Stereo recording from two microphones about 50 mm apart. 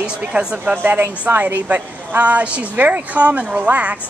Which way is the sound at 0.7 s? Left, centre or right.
Right.